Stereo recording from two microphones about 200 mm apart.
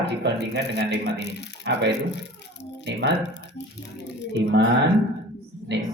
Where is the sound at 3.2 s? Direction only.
60° left (ahead or behind).